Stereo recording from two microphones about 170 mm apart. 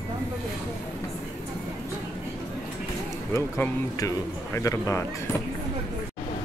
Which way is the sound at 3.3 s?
15° left (ahead or behind).